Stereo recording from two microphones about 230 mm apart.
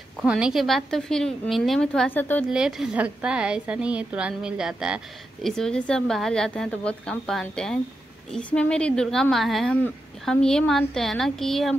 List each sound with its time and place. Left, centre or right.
0.2 s a woman's voice: centre
2.5 s a woman's voice: centre